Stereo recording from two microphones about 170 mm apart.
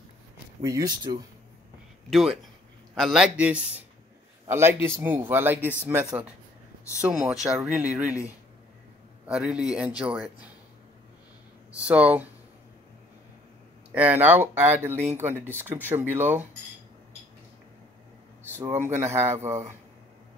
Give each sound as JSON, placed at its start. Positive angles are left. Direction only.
{"t": 0.6, "sound": "speech", "side_deg": -20}
{"t": 2.0, "sound": "speech", "side_deg": 0}
{"t": 9.3, "sound": "speech", "side_deg": -5}
{"t": 11.7, "sound": "speech", "side_deg": -10}
{"t": 13.9, "sound": "speech", "side_deg": -10}
{"t": 18.5, "sound": "speech", "side_deg": -15}